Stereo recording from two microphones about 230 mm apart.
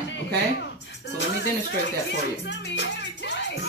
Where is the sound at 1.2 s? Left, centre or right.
Left.